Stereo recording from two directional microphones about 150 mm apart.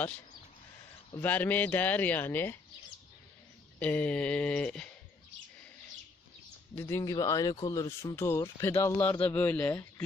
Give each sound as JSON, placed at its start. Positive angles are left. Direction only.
{"t": 1.2, "sound": "a man's voice", "side_deg": 10}
{"t": 3.8, "sound": "a man's voice", "side_deg": 10}
{"t": 6.7, "sound": "a man's voice", "side_deg": 15}